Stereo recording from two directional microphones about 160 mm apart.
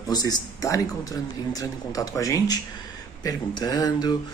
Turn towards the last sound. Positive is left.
turn(degrees=25)  # may be behind; listen again after turning